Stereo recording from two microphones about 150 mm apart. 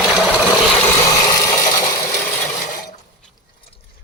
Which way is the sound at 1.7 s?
25° left (ahead or behind).